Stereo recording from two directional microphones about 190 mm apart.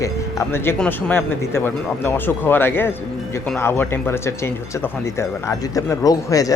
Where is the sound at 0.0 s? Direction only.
15° left (ahead or behind).